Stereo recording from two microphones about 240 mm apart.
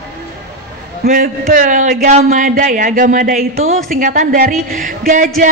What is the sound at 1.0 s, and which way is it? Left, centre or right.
A man's voice, right.